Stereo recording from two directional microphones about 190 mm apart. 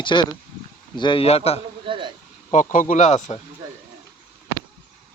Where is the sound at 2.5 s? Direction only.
40° left (ahead or behind).